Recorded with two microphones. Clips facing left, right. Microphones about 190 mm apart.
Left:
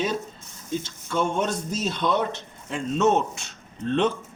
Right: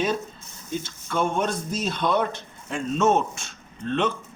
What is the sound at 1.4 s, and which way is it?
Speech, 25° left (ahead or behind).